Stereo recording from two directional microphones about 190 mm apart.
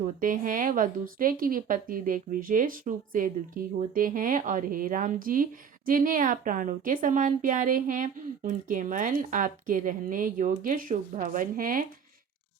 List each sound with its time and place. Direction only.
0.0 s speech: 45° right (ahead or behind)